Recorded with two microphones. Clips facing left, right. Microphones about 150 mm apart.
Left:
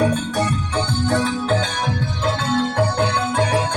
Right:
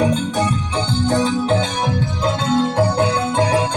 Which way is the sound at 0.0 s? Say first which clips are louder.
Right 1 dB; 15° right (ahead or behind).